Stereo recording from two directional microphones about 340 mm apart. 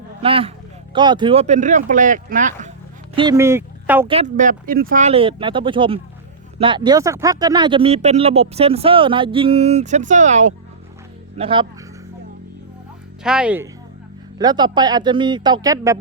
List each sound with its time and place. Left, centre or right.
0.2 s speech: centre
3.2 s speech: centre
4.1 s speech: right
13.2 s speech: centre